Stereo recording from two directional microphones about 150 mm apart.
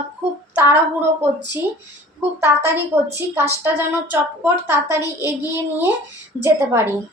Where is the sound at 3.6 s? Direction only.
15° right (ahead or behind).